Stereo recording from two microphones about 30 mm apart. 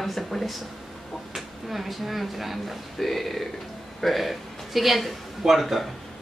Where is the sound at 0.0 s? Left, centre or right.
Centre.